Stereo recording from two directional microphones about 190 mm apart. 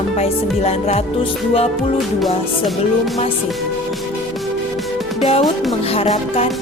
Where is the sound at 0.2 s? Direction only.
35° left (ahead or behind).